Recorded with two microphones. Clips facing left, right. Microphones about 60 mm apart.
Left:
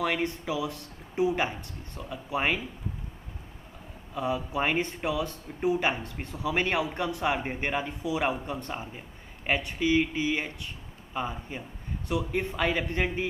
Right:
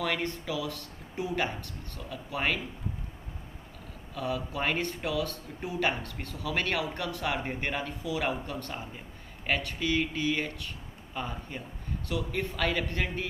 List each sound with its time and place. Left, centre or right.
0.0 s speech: centre
4.1 s a man's voice: left